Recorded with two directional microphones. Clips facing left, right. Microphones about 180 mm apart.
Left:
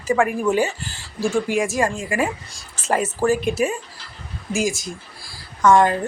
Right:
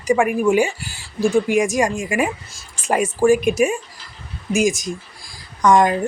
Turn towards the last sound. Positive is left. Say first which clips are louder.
# even
turn(degrees=-15)  # may be behind; listen again after turning